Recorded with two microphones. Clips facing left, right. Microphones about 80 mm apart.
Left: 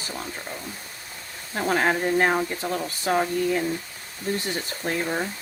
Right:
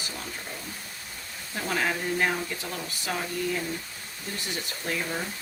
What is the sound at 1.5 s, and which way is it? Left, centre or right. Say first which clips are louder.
Speech: left 6 dB; left.